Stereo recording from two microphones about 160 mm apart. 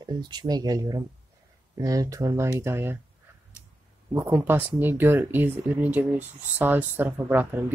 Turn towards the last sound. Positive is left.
turn(degrees=-10)  # may be behind; listen again after turning